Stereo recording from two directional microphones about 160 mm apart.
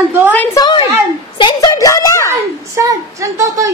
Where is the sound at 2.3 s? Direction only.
20° right (ahead or behind).